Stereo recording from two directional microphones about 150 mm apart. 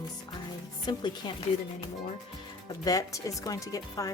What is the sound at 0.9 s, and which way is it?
Speech, 30° left (ahead or behind).